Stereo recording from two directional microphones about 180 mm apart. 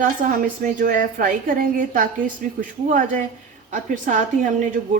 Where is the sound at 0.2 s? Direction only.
45° right (ahead or behind).